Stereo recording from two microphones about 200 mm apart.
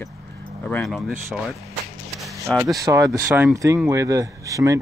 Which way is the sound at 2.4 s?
15° right (ahead or behind).